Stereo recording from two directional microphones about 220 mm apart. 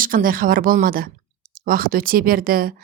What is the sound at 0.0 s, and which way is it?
A woman's voice, 40° right (ahead or behind).